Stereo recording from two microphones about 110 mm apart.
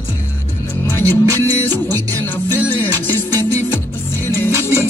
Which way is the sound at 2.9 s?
35° right (ahead or behind).